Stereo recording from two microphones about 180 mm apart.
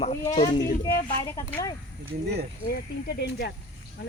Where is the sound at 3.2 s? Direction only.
65° left (ahead or behind).